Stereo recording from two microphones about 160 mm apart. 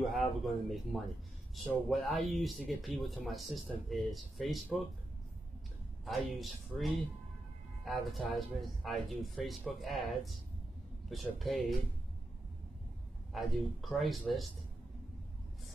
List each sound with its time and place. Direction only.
0.0 s speech: centre (ahead or behind)
6.0 s speech: centre (ahead or behind)
7.8 s speech: centre (ahead or behind)
13.3 s speech: centre (ahead or behind)